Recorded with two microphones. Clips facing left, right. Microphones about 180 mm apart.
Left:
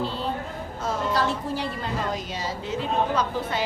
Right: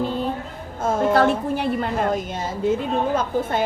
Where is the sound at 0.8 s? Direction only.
50° right (ahead or behind).